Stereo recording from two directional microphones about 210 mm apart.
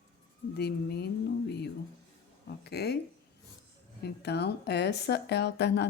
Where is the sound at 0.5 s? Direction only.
50° left (ahead or behind).